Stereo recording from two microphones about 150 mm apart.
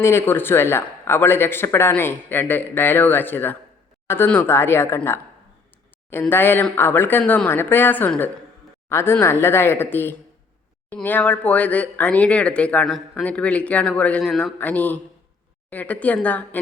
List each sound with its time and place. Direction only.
0.0 s speech: 15° left (ahead or behind)